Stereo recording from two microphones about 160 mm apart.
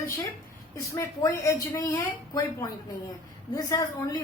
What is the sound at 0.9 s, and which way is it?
A woman's voice, 20° left (ahead or behind).